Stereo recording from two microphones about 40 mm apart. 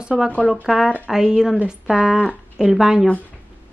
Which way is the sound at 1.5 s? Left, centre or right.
Right.